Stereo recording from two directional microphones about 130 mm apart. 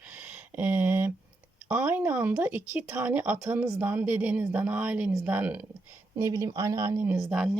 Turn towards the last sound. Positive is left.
turn(degrees=-5)  # may be behind; listen again after turning